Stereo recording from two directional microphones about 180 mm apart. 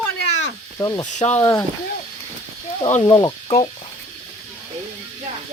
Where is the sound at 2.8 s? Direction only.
30° left (ahead or behind).